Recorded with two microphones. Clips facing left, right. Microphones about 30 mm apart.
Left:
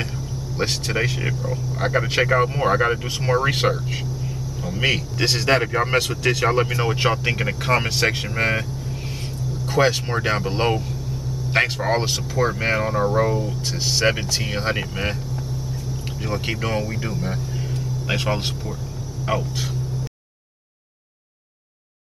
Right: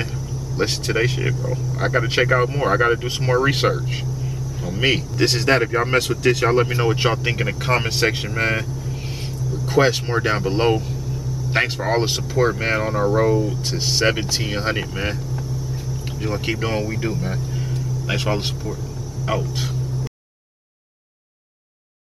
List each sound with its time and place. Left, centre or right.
0.6 s speech: centre
9.7 s speech: centre